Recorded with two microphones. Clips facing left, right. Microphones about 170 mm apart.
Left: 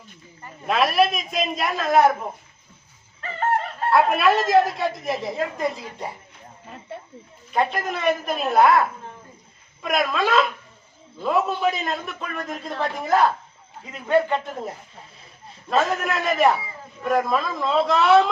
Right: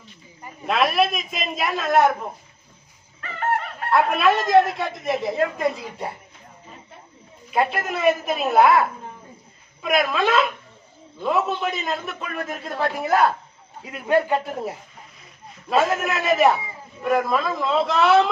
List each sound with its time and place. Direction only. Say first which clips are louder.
0.7 s a woman's voice: left 1 dB; centre (ahead or behind)
3.2 s fowl: left 3 dB; 30° left (ahead or behind)
3.9 s a woman's voice: even; centre (ahead or behind)
7.5 s a woman's voice: right 1 dB; 5° right (ahead or behind)
9.8 s a woman's voice: right 2 dB; centre (ahead or behind)